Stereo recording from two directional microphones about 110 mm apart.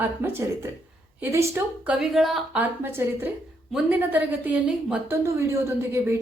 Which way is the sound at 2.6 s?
20° right (ahead or behind).